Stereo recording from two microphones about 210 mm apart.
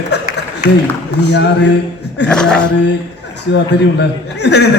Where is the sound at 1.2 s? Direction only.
55° left (ahead or behind).